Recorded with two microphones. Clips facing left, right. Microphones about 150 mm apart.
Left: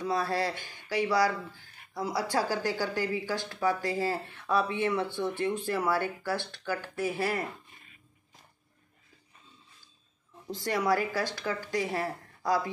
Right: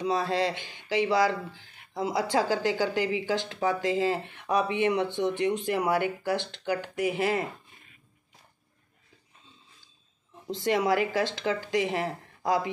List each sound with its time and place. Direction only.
0.0 s speech: 20° right (ahead or behind)
10.4 s speech: 20° right (ahead or behind)